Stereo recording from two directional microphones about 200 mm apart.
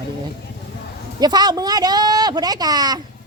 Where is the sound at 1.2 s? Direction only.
20° right (ahead or behind).